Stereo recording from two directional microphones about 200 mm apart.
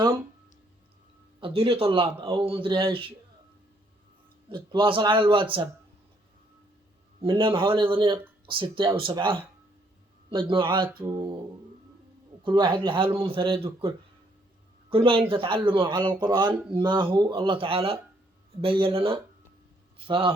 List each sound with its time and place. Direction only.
1.4 s a man's voice: 25° right (ahead or behind)
4.4 s a man's voice: 25° right (ahead or behind)
7.2 s a man's voice: 25° right (ahead or behind)
11.0 s speech: 15° right (ahead or behind)
12.4 s a man's voice: 25° right (ahead or behind)